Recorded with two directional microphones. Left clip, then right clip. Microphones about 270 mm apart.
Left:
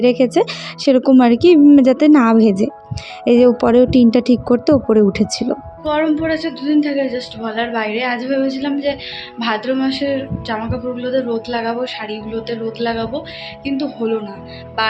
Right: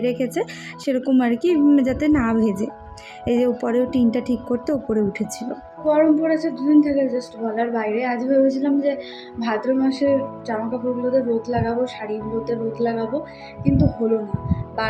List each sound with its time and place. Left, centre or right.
0.0 s speech: centre
5.8 s a woman's voice: centre